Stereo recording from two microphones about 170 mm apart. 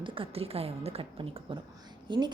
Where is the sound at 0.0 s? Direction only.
30° right (ahead or behind).